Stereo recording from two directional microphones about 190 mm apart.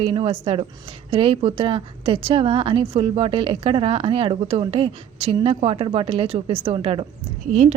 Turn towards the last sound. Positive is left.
turn(degrees=-35)  # may be behind; listen again after turning